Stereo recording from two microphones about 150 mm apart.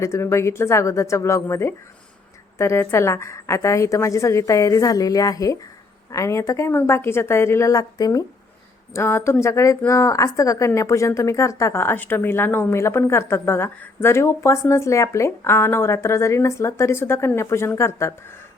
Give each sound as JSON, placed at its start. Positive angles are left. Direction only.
{"t": 0.0, "sound": "a woman's voice", "side_deg": 20}